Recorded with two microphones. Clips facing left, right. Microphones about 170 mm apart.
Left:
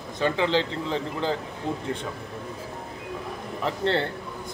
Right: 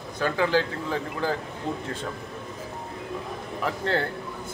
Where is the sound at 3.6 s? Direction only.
30° left (ahead or behind).